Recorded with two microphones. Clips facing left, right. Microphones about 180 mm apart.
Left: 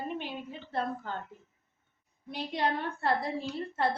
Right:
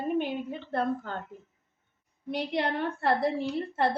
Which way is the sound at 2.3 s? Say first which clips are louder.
Right 3 dB; 65° right (ahead or behind).